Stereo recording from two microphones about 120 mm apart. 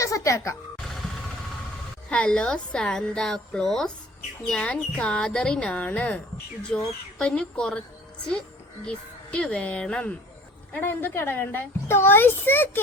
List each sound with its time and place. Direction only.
0.0 s music: 25° left (ahead or behind)
2.0 s a woman's voice: 10° left (ahead or behind)
8.9 s a child's voice: 10° left (ahead or behind)